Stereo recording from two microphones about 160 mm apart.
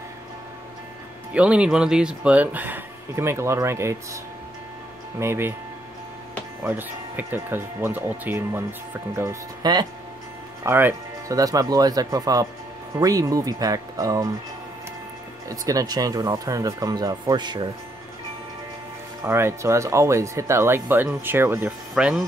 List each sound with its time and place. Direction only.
1.3 s speech: 5° right (ahead or behind)
5.2 s speech: 15° right (ahead or behind)
6.6 s speech: 10° right (ahead or behind)
10.6 s speech: 15° right (ahead or behind)
15.4 s speech: 20° right (ahead or behind)
19.2 s speech: 15° right (ahead or behind)